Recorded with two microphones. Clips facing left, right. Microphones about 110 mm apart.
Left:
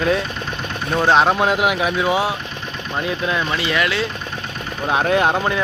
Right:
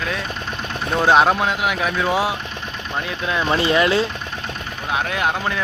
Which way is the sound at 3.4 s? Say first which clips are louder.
Right 4 dB; 30° right (ahead or behind).